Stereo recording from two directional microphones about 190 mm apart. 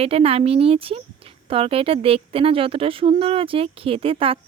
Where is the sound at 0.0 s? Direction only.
30° right (ahead or behind).